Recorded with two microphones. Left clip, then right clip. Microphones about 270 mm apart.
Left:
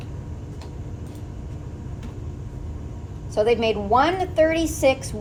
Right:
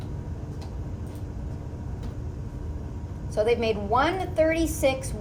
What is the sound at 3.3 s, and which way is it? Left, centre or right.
A woman's voice, left.